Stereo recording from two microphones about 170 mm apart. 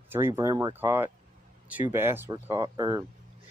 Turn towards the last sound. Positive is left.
turn(degrees=-25)  # may be behind; listen again after turning